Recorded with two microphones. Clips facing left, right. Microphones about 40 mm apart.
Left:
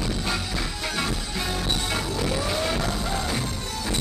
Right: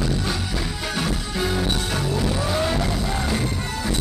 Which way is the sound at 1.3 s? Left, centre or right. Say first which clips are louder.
Right 5 dB; centre.